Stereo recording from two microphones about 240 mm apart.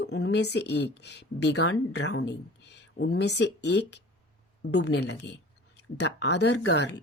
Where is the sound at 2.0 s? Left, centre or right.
Left.